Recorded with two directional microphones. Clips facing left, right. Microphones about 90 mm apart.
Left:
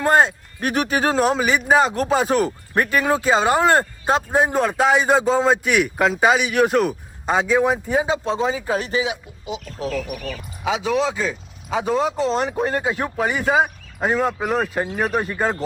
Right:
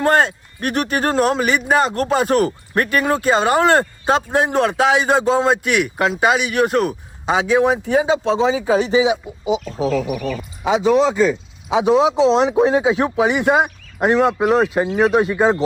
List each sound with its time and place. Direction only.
0.0 s speech: centre (ahead or behind)
9.6 s speech: 15° right (ahead or behind)
9.9 s speech: 5° right (ahead or behind)
12.0 s speech: 90° right
12.6 s speech: 10° right (ahead or behind)